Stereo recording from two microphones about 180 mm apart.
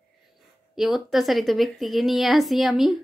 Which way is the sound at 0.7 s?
Centre (ahead or behind).